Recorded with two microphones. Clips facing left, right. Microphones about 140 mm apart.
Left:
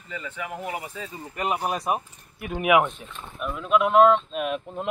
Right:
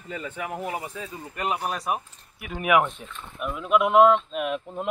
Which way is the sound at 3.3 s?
5° right (ahead or behind).